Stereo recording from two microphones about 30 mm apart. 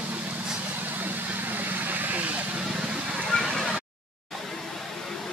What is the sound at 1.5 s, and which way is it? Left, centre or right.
Vehicle, right.